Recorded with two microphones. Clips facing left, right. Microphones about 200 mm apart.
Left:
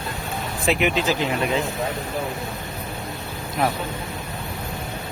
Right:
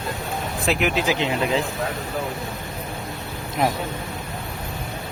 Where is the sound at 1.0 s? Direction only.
15° right (ahead or behind).